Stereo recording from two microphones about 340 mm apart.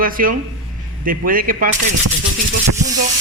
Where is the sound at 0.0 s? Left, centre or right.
Right.